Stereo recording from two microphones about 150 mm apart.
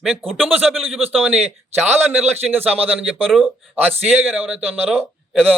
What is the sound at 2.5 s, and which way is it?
Speech, 10° right (ahead or behind).